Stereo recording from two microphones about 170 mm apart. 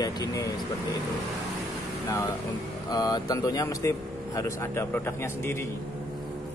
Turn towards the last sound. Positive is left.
turn(degrees=15)  # may be behind; listen again after turning